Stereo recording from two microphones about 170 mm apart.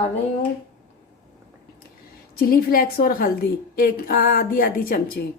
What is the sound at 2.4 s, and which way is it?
Speech, 60° left (ahead or behind).